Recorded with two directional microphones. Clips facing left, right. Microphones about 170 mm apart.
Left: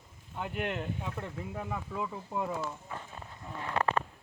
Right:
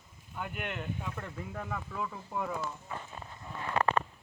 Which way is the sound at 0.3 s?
30° left (ahead or behind).